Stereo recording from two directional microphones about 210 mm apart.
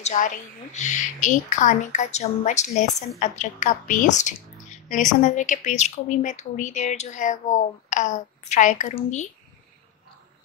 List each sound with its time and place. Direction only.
0.0 s a woman's voice: 35° left (ahead or behind)